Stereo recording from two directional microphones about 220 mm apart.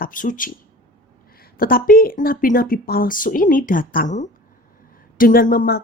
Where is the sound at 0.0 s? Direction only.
40° left (ahead or behind).